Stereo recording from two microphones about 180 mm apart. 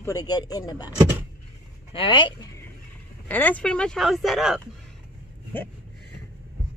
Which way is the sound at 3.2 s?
10° left (ahead or behind).